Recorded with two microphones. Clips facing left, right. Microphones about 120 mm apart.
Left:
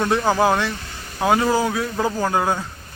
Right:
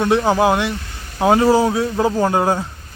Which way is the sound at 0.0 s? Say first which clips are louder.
Right 3 dB; 15° right (ahead or behind).